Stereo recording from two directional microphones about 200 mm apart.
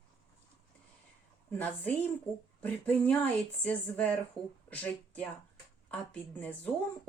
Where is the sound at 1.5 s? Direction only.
10° left (ahead or behind).